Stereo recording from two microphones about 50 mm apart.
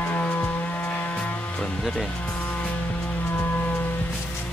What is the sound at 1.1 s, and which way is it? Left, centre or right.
Music, centre.